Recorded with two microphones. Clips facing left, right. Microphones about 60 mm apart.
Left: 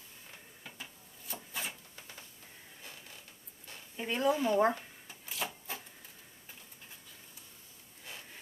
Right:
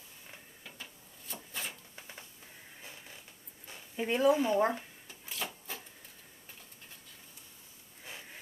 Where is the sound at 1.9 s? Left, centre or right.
Centre.